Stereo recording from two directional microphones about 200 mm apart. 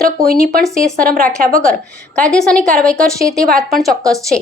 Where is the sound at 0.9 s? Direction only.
45° right (ahead or behind).